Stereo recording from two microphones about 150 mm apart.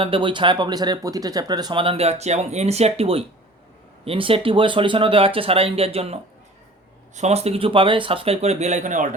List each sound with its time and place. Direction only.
0.0 s speech: 35° right (ahead or behind)
7.2 s speech: 45° right (ahead or behind)